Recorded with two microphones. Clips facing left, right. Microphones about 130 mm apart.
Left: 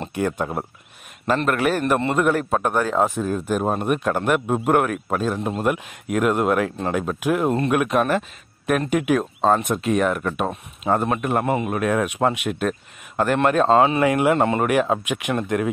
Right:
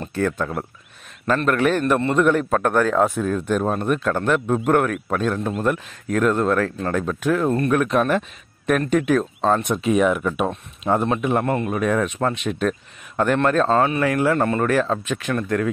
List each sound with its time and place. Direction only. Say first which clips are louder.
0.1 s speech: right 1 dB; 15° left (ahead or behind)